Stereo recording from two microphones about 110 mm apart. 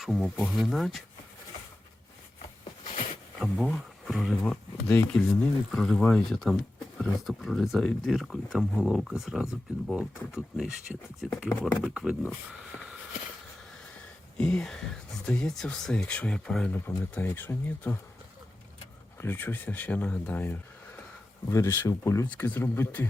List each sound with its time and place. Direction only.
0.0 s speech: centre (ahead or behind)
3.4 s speech: 5° right (ahead or behind)
14.3 s speech: 5° left (ahead or behind)
16.7 s speech: 20° left (ahead or behind)
19.2 s speech: 20° left (ahead or behind)
22.3 s speech: 15° left (ahead or behind)